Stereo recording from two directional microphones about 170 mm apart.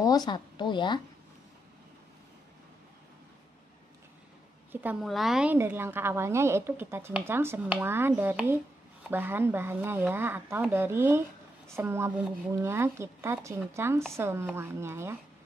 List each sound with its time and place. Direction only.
0.0 s a woman's voice: 25° left (ahead or behind)
5.0 s a woman's voice: centre (ahead or behind)